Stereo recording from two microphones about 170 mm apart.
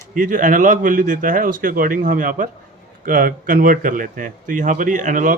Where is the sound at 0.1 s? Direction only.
50° right (ahead or behind).